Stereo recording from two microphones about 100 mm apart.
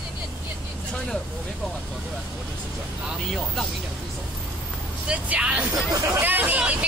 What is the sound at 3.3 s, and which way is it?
Speech, centre (ahead or behind).